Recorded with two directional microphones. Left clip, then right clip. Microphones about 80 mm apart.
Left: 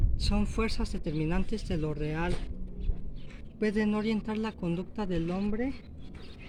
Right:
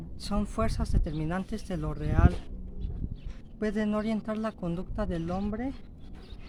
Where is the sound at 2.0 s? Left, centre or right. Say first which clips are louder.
Right 2 dB; right.